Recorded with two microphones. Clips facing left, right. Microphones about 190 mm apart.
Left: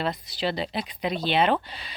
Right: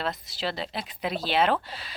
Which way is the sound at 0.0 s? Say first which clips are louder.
Left 3 dB; centre (ahead or behind).